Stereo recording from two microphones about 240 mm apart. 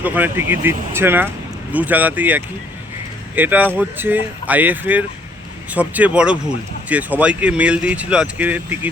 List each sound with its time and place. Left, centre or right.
0.0 s speech: centre